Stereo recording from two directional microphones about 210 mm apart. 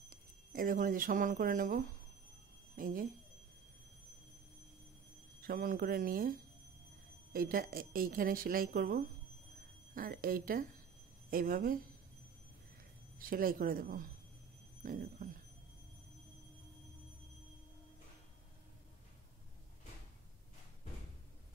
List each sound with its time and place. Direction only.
0.1 s speech: 40° right (ahead or behind)
5.4 s speech: 45° right (ahead or behind)
7.3 s speech: 45° right (ahead or behind)
13.2 s speech: 45° right (ahead or behind)